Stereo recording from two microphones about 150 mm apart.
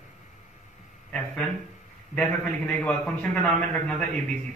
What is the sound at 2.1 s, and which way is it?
A man's voice, 10° left (ahead or behind).